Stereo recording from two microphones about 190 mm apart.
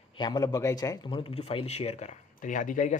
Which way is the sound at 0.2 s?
20° left (ahead or behind).